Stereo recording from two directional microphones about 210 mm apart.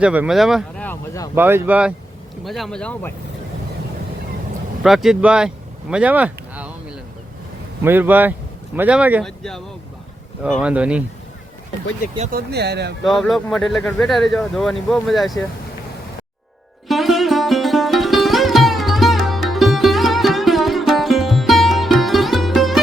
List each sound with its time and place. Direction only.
0.0 s speech: 5° right (ahead or behind)
0.9 s speech: 15° left (ahead or behind)
1.4 s speech: 10° right (ahead or behind); by 3.1 s 5° left (ahead or behind)
4.8 s speech: centre (ahead or behind)
5.9 s a sound: 5° right (ahead or behind)
7.9 s speech: 10° right (ahead or behind)
12.3 s speech: 50° right (ahead or behind)
13.1 s speech: centre (ahead or behind)
16.9 s sitar: centre (ahead or behind)